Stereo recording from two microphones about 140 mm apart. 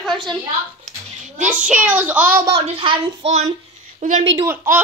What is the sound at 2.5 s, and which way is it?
Speech, 40° right (ahead or behind).